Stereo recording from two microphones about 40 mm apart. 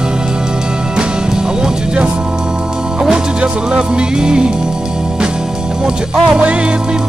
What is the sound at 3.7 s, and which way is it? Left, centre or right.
Music, right.